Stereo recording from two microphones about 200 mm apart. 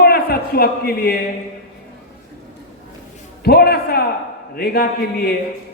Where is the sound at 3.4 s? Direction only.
50° left (ahead or behind).